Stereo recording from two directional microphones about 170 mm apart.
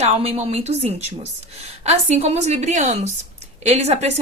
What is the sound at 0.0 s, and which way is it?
A woman's voice, 35° right (ahead or behind).